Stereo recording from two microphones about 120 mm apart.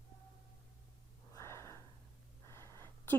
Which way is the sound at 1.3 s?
25° left (ahead or behind).